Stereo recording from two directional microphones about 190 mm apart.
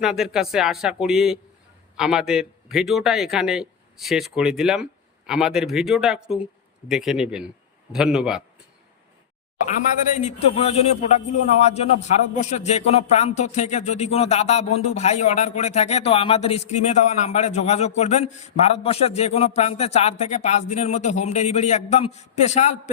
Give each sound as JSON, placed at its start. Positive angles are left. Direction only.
{"t": 0.0, "sound": "a man's voice", "side_deg": -5}
{"t": 9.6, "sound": "speech", "side_deg": 40}